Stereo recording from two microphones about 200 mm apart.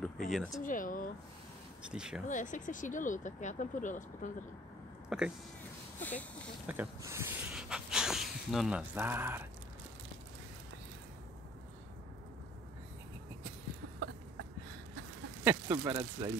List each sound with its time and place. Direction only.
0.0 s speech: centre (ahead or behind)
0.6 s speech: 40° left (ahead or behind)
1.9 s speech: 5° right (ahead or behind)
2.2 s speech: 40° left (ahead or behind)
5.1 s speech: 5° right (ahead or behind)
5.9 s speech: 10° left (ahead or behind)
6.7 s speech: 10° right (ahead or behind)
13.9 s a sound: 65° right (ahead or behind)
15.4 s speech: 10° right (ahead or behind)